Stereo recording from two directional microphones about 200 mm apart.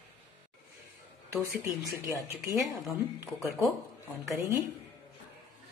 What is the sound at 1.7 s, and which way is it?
Speech, centre (ahead or behind).